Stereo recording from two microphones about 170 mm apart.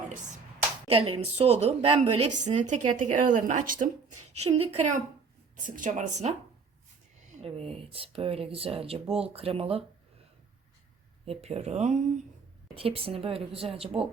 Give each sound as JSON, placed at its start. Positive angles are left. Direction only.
{"t": 0.9, "sound": "speech", "side_deg": -35}
{"t": 4.4, "sound": "speech", "side_deg": -35}
{"t": 5.6, "sound": "speech", "side_deg": -50}
{"t": 7.4, "sound": "speech", "side_deg": -35}
{"t": 11.3, "sound": "speech", "side_deg": -35}